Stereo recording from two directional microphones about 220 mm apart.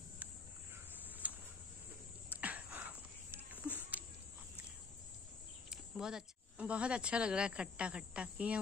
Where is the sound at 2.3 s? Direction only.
5° right (ahead or behind).